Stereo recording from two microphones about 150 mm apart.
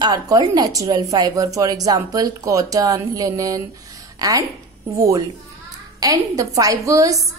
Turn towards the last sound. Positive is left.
turn(degrees=-20)  # may be behind; listen again after turning